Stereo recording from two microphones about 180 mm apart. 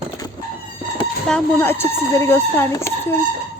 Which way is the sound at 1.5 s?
10° left (ahead or behind).